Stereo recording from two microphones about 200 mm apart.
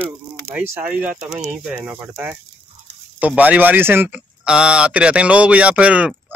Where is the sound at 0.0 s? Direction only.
5° right (ahead or behind).